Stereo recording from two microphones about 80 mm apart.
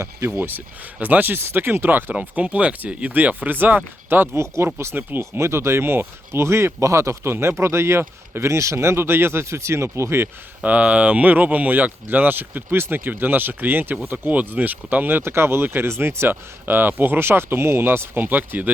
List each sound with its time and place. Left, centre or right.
0.4 s speech: right
10.6 s speech: centre